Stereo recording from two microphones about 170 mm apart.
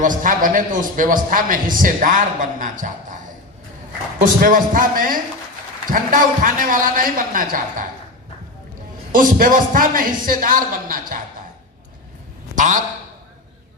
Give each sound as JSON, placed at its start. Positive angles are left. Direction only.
{"t": 0.0, "sound": "a man's voice", "side_deg": -50}
{"t": 4.2, "sound": "a man's voice", "side_deg": -50}
{"t": 9.1, "sound": "a man's voice", "side_deg": -50}
{"t": 12.5, "sound": "a man's voice", "side_deg": -45}